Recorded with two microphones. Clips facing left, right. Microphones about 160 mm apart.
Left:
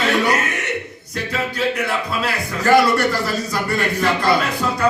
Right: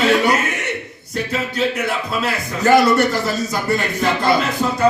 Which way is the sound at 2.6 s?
20° right (ahead or behind).